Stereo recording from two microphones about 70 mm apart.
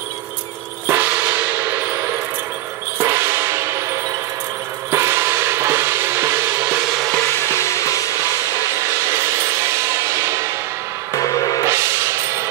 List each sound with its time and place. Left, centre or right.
0.8 s music: right
3.0 s a sound: right
4.9 s music: right
7.5 s music: left
9.7 s a sound: right
11.1 s music: left
11.6 s music: right